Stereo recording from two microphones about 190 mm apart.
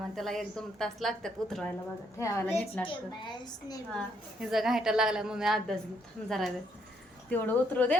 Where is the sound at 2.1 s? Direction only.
15° left (ahead or behind).